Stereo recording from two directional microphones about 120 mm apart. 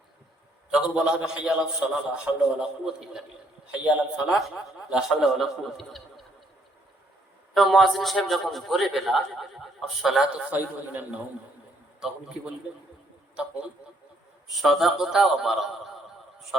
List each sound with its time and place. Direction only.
0.7 s a man's voice: 5° right (ahead or behind)
7.5 s a man's voice: centre (ahead or behind)
14.4 s a man's voice: centre (ahead or behind)